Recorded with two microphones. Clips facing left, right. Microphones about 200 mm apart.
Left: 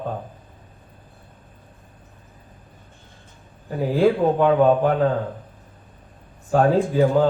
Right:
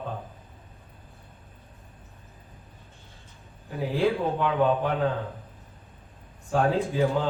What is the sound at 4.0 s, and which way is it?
Speech, 45° left (ahead or behind).